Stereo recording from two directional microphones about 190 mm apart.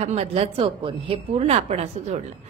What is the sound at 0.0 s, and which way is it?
A woman's voice, 35° right (ahead or behind).